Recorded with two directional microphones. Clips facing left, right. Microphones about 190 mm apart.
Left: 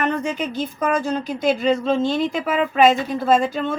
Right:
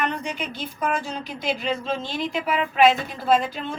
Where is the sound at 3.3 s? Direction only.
45° left (ahead or behind).